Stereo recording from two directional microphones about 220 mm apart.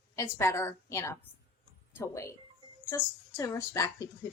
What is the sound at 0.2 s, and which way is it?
A woman's voice, 10° left (ahead or behind).